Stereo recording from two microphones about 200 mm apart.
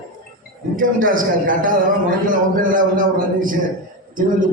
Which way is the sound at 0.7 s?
45° right (ahead or behind).